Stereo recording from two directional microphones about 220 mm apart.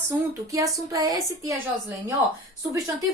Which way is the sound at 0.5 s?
15° right (ahead or behind).